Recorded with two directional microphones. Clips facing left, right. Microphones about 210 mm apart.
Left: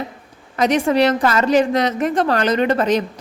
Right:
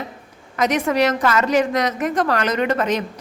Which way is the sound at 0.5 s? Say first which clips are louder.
Left 3 dB; 30° left (ahead or behind).